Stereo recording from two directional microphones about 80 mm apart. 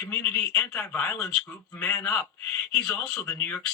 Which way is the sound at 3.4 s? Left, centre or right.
Centre.